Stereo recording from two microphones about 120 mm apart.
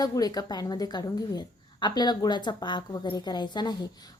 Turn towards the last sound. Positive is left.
turn(degrees=35)  # may be behind; listen again after turning